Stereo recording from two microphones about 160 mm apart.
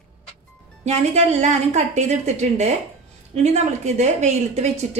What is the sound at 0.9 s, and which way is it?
A woman's voice, 45° right (ahead or behind).